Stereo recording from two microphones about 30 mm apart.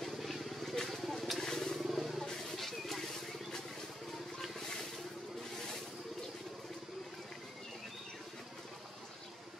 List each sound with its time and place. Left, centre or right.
0.0 s vehicle: centre
1.9 s vehicle: centre
2.5 s a sound: centre
4.4 s vehicle: centre